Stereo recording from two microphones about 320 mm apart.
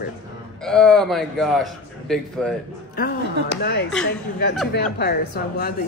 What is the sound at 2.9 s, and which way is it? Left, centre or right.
Speech, left.